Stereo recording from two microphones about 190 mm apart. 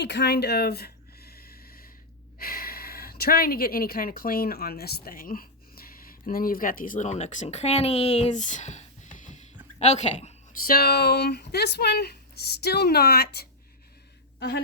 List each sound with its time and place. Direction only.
0.0 s a sound: 60° left (ahead or behind)
2.4 s speech: 50° left (ahead or behind); by 10.3 s 35° left (ahead or behind)
10.7 s speech: 55° left (ahead or behind)